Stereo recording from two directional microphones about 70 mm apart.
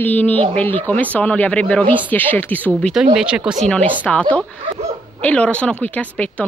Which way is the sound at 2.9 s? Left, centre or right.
Centre.